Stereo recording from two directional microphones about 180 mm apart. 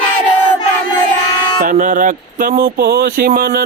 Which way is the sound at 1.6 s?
45° right (ahead or behind).